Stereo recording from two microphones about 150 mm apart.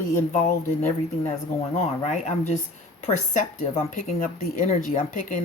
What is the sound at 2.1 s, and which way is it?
Speech, 50° left (ahead or behind).